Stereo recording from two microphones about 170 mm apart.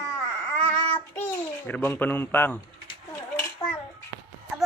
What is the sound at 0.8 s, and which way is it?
Child singing, 25° left (ahead or behind).